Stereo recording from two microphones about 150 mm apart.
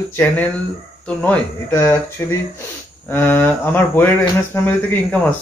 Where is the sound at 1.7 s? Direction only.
20° left (ahead or behind).